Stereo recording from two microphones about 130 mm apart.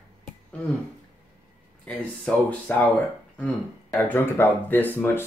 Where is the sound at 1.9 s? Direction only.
10° left (ahead or behind).